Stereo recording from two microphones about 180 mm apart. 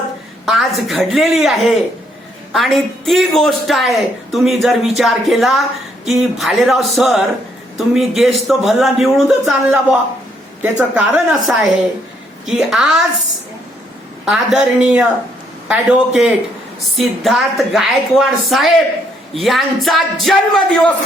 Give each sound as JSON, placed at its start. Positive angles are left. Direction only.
{"t": 0.4, "sound": "a woman's voice", "side_deg": 0}
{"t": 12.5, "sound": "a woman's voice", "side_deg": -5}
{"t": 14.3, "sound": "a woman's voice", "side_deg": 0}